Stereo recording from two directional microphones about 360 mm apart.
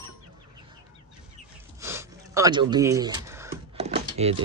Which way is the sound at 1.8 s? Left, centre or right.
Centre.